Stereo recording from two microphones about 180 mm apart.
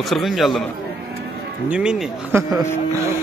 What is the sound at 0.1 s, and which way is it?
Speech, centre (ahead or behind).